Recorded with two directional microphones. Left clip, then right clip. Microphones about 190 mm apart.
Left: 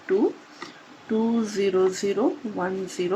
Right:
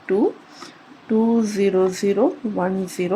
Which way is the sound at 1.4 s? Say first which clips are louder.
Right 3 dB; 25° right (ahead or behind).